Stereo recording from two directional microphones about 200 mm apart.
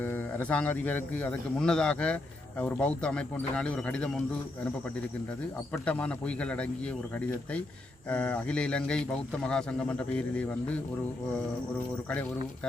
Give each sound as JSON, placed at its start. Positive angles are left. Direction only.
{"t": 0.0, "sound": "a man's voice", "side_deg": 10}
{"t": 5.7, "sound": "a man's voice", "side_deg": 5}